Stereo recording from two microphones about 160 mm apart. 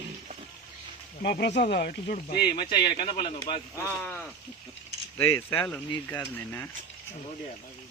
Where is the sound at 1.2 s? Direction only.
90° left; by 2.1 s 70° left (ahead or behind).